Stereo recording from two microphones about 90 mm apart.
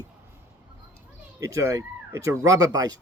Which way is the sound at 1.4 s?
40° right (ahead or behind).